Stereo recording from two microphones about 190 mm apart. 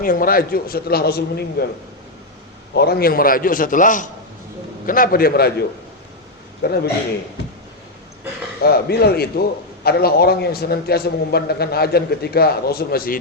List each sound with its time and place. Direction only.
0.0 s a man's voice: 50° left (ahead or behind)
2.7 s a man's voice: 55° left (ahead or behind)
8.6 s a man's voice: 55° left (ahead or behind)